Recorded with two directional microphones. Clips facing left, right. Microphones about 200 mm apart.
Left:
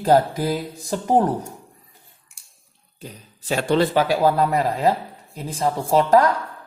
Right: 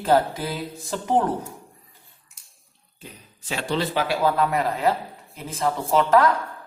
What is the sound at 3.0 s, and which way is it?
Speech, 40° left (ahead or behind).